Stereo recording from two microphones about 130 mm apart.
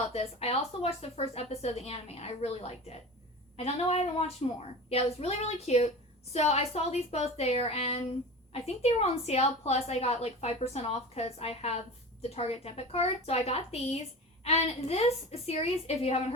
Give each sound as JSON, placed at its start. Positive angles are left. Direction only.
{"t": 0.1, "sound": "a woman's voice", "side_deg": 50}